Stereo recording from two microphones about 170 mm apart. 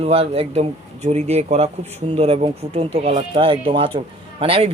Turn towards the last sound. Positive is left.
turn(degrees=-35)  # may be behind; listen again after turning